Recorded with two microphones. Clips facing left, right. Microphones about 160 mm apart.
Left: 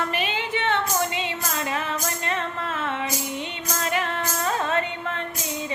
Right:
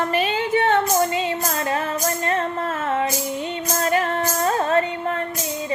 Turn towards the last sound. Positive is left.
turn(degrees=-40)  # may be behind; listen again after turning